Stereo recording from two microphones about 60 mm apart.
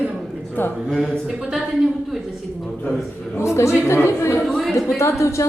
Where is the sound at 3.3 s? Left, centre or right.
Left.